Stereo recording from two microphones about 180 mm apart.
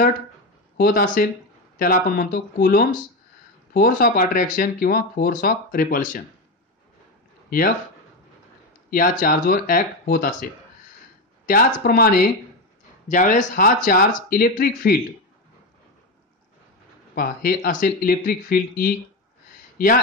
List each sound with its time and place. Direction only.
0.7 s speech: 55° left (ahead or behind)
7.4 s a man's voice: 55° left (ahead or behind)
8.9 s speech: 50° left (ahead or behind)
13.1 s speech: 45° left (ahead or behind)
17.1 s speech: 55° left (ahead or behind)